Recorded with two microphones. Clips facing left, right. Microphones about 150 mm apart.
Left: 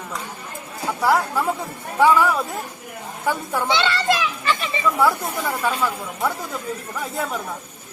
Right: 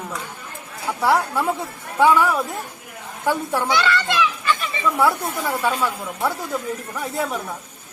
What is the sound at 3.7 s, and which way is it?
Speech, 25° left (ahead or behind).